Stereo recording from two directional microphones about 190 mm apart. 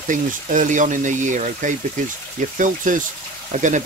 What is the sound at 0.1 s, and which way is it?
Speech, 45° right (ahead or behind).